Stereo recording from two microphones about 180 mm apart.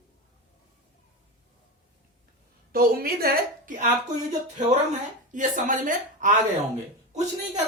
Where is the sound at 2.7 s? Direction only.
55° right (ahead or behind).